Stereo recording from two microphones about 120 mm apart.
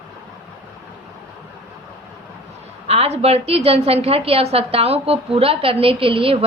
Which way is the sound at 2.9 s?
60° right (ahead or behind).